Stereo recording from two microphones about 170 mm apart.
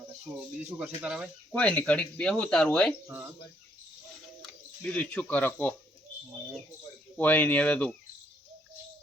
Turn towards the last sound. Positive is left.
turn(degrees=10)  # may be behind; listen again after turning